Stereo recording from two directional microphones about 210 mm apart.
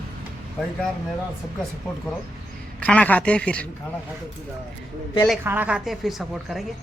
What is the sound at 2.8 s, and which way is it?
Speech, 5° left (ahead or behind).